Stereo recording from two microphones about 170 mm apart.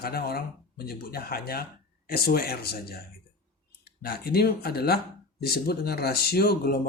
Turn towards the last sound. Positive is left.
turn(degrees=60)  # may be behind; listen again after turning